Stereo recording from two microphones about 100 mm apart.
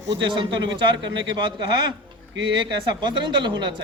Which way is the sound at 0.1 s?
50° right (ahead or behind).